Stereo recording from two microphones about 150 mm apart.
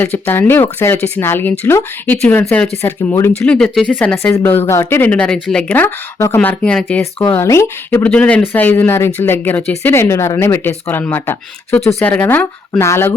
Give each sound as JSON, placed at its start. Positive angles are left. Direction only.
{"t": 0.0, "sound": "speech", "side_deg": 15}
{"t": 8.0, "sound": "speech", "side_deg": 10}